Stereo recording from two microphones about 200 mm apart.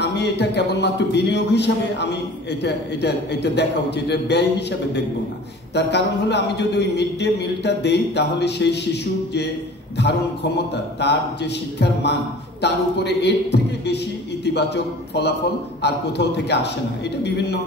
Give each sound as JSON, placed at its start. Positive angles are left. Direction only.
{"t": 0.0, "sound": "a man's voice", "side_deg": 55}
{"t": 11.0, "sound": "a man's voice", "side_deg": 60}